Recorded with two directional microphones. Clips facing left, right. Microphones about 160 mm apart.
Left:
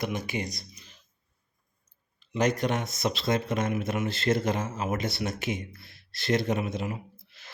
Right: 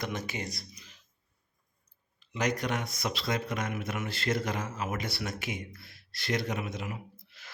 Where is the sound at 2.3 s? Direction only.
25° left (ahead or behind).